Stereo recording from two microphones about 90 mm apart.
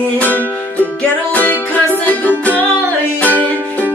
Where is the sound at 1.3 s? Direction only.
20° left (ahead or behind).